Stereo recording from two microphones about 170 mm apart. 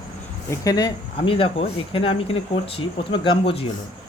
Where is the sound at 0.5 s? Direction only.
20° left (ahead or behind).